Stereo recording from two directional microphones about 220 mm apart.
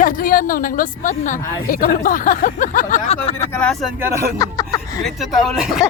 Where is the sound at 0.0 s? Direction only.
40° left (ahead or behind).